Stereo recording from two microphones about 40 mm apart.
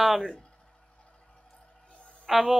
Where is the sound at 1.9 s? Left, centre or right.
Left.